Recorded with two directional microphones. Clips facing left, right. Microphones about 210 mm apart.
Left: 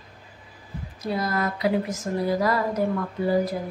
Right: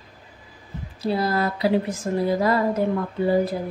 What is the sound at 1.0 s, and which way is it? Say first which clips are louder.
Speech: right 4 dB; 30° right (ahead or behind).